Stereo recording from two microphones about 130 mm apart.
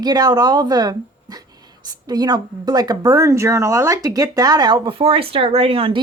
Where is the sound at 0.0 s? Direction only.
30° right (ahead or behind).